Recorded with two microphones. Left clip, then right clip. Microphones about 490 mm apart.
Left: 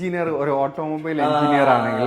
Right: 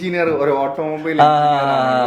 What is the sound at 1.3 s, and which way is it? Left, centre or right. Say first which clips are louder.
Mantra: right 5 dB; right.